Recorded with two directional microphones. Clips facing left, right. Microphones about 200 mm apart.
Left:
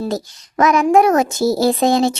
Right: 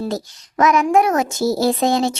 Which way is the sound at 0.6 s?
35° left (ahead or behind).